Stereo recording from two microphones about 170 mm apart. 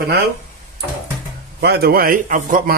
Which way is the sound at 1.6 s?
70° right (ahead or behind).